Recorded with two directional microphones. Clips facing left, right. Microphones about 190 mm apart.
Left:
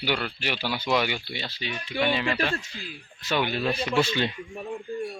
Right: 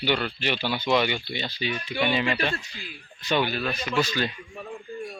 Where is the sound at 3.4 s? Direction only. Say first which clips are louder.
Left 2 dB; 25° left (ahead or behind).